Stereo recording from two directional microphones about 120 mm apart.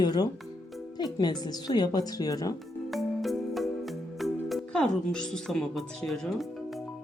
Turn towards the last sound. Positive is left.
turn(degrees=5)  # may be behind; listen again after turning